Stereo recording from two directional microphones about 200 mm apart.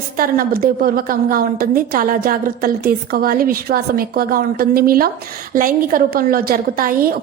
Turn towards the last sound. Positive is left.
turn(degrees=-45)  # may be behind; listen again after turning